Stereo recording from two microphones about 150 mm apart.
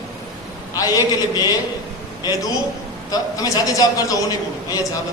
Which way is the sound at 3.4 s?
25° left (ahead or behind).